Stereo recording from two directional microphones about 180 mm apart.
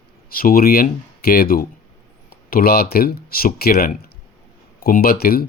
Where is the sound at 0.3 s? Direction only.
55° left (ahead or behind).